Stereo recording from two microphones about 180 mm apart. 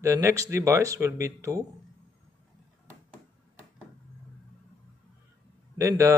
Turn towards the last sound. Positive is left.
turn(degrees=-15)  # may be behind; listen again after turning